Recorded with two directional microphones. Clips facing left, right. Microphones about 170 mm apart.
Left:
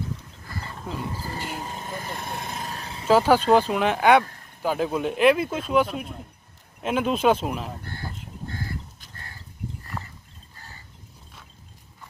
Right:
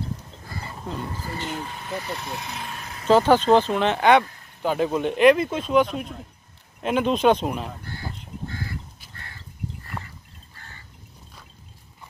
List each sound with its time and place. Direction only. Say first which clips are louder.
0.8 s speech: even; 10° left (ahead or behind)
1.6 s speech: right 2 dB; 45° left (ahead or behind)
3.1 s speech: right 1 dB; 10° left (ahead or behind)
8.5 s crow: left 1 dB; 45° left (ahead or behind)